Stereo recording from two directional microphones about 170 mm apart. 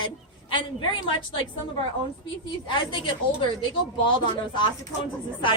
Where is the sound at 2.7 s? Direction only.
30° left (ahead or behind).